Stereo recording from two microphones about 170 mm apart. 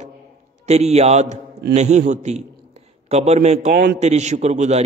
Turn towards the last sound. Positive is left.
turn(degrees=-40)  # may be behind; listen again after turning